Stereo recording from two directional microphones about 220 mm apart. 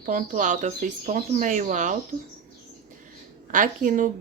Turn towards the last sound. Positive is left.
turn(degrees=-40)  # may be behind; listen again after turning